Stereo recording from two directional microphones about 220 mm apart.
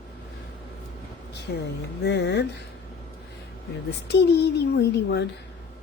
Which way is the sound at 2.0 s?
50° left (ahead or behind).